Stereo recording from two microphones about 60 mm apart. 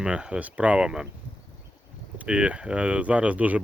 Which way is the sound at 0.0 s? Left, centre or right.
Centre.